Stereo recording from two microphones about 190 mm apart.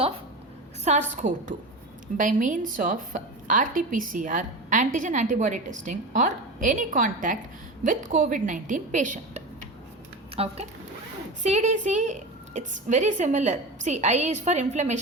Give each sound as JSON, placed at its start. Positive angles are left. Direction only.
{"t": 1.1, "sound": "a woman's voice", "side_deg": -40}